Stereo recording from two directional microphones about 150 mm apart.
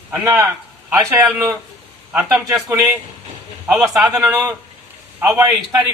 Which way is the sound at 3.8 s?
20° right (ahead or behind).